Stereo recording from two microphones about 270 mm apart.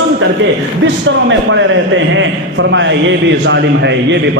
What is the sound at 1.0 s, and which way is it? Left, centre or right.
A man's voice, right.